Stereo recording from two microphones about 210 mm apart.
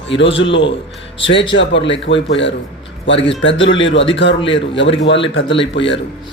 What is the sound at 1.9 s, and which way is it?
Speech, 60° left (ahead or behind).